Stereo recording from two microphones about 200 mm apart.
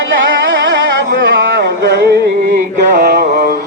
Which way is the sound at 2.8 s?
45° right (ahead or behind).